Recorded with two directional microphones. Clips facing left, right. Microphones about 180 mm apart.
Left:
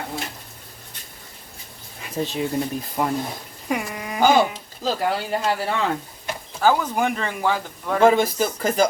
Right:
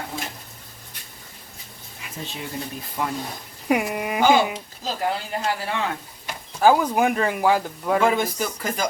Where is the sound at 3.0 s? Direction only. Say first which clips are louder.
Left 4 dB; 50° left (ahead or behind).